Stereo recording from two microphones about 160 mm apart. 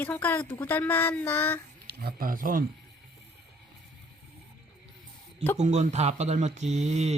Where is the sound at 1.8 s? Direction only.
75° right (ahead or behind).